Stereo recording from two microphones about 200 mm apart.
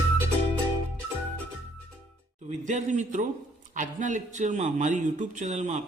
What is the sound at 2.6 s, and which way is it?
A man's voice, 40° right (ahead or behind).